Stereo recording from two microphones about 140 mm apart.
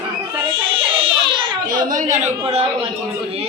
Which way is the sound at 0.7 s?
40° right (ahead or behind).